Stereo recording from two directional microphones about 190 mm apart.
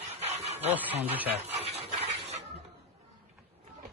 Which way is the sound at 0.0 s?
35° right (ahead or behind).